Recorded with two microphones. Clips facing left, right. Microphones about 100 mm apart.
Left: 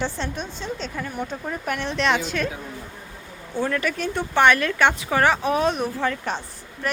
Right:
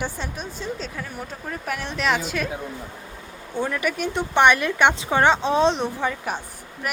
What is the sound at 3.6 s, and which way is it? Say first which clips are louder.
Speech: even; 10° right (ahead or behind).